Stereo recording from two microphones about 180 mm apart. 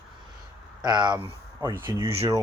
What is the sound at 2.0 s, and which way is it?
Speech, 35° right (ahead or behind).